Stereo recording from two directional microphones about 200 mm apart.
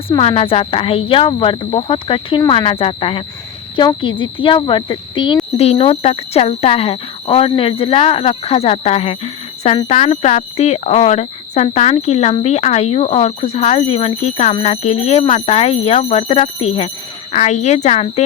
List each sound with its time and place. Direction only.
0.1 s speech: 25° left (ahead or behind)